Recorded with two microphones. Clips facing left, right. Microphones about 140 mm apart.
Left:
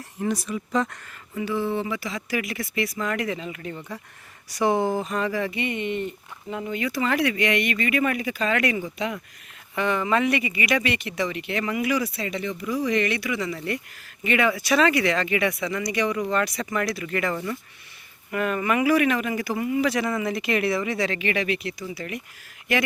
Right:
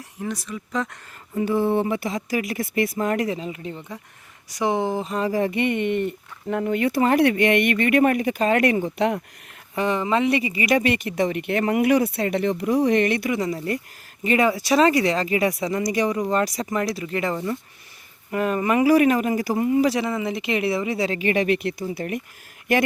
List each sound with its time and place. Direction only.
0.2 s speech: 10° left (ahead or behind)
1.4 s speech: 50° right (ahead or behind)
2.3 s speech: 40° right (ahead or behind); by 4.9 s 20° right (ahead or behind)
5.0 s speech: 30° right (ahead or behind)
5.3 s speech: 45° right (ahead or behind)
9.7 s speech: 35° right (ahead or behind)
20.0 s speech: 20° right (ahead or behind); by 22.8 s 45° right (ahead or behind)